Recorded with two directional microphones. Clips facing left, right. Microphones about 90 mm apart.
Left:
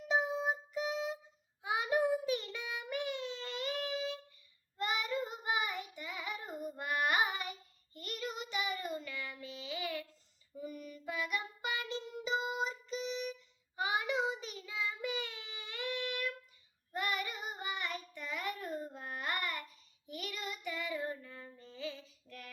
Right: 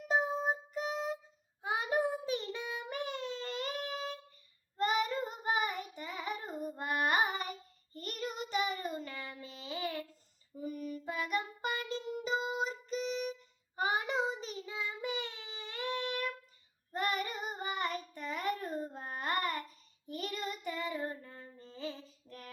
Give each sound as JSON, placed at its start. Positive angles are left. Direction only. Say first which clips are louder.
{"t": 0.1, "sound": "music", "louder": "right 1 dB", "side_deg": -40}
{"t": 1.6, "sound": "child singing", "louder": "even", "side_deg": -35}
{"t": 12.6, "sound": "music", "louder": "right 2 dB", "side_deg": -45}
{"t": 13.7, "sound": "child singing", "louder": "right 1 dB", "side_deg": -40}